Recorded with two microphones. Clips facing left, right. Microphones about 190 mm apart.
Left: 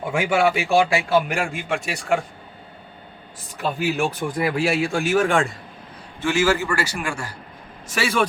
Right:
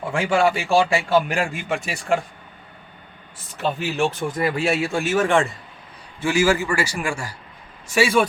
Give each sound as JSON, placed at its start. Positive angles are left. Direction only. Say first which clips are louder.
{"t": 0.1, "sound": "speech", "louder": "even", "side_deg": 5}
{"t": 0.9, "sound": "speech", "louder": "right 1 dB", "side_deg": 0}
{"t": 3.6, "sound": "a man's voice", "louder": "even", "side_deg": 0}